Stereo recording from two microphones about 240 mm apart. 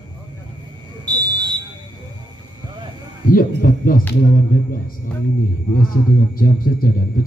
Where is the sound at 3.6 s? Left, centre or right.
Left.